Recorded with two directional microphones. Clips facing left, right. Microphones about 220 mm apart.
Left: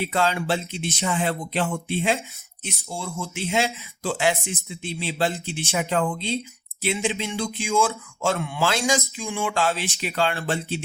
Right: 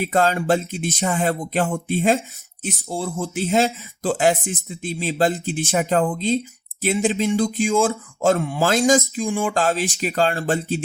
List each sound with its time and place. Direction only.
0.0 s speech: 45° right (ahead or behind)